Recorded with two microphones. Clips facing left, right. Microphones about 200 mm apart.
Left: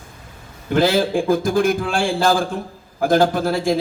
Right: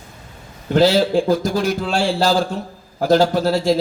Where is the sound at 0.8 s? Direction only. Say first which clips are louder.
Right 2 dB; 50° left (ahead or behind).